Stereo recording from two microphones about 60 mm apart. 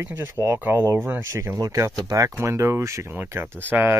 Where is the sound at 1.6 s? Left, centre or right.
Right.